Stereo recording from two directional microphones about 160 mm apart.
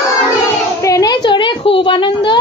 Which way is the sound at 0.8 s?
20° left (ahead or behind).